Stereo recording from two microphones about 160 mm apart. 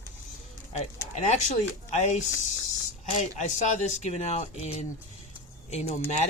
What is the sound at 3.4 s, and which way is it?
Speech, 45° left (ahead or behind).